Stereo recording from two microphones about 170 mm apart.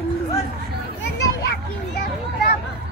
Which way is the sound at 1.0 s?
80° left.